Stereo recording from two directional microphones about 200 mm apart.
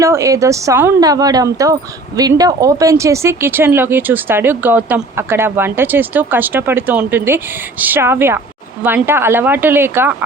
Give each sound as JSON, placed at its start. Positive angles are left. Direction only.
{"t": 0.0, "sound": "speech", "side_deg": -15}